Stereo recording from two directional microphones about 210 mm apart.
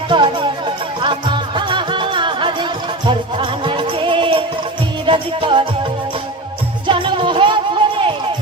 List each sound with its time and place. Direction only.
0.1 s music: 20° right (ahead or behind)
6.8 s music: 25° right (ahead or behind)